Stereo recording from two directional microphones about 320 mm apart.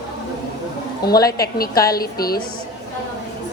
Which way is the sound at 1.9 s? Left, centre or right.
Left.